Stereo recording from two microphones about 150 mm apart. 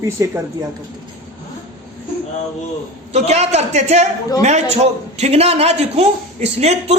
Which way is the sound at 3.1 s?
45° right (ahead or behind).